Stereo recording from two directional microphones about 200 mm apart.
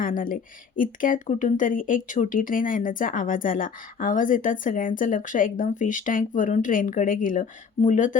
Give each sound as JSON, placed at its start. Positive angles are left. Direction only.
{"t": 0.0, "sound": "speech", "side_deg": 45}